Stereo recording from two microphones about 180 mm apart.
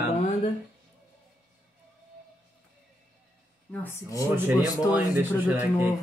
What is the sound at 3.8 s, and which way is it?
Speech, 15° left (ahead or behind).